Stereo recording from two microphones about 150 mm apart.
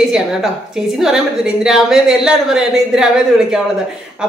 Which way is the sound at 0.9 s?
5° right (ahead or behind).